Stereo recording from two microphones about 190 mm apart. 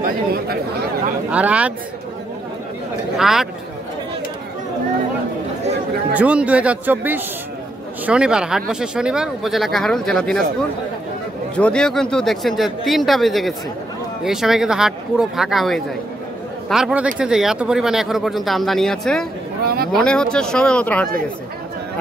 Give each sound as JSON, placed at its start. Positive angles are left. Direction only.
{"t": 0.0, "sound": "speech", "side_deg": -55}
{"t": 1.3, "sound": "a man's voice", "side_deg": -5}
{"t": 3.2, "sound": "speech", "side_deg": 0}
{"t": 6.1, "sound": "a man's voice", "side_deg": -5}
{"t": 11.5, "sound": "speech", "side_deg": 5}
{"t": 19.6, "sound": "speech", "side_deg": -55}
{"t": 19.9, "sound": "speech", "side_deg": 5}